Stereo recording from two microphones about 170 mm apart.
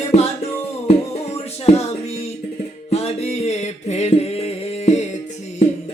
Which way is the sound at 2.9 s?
40° left (ahead or behind).